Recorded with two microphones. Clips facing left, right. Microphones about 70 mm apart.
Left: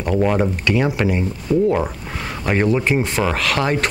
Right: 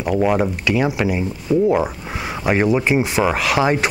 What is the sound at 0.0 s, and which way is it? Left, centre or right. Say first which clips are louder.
Speech: right 1 dB; centre.